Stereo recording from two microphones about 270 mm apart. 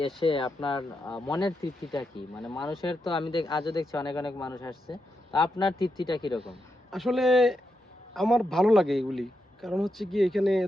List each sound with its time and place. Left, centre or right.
0.2 s speech: centre
1.9 s a man's voice: centre
2.5 s speech: centre
6.9 s a man's voice: centre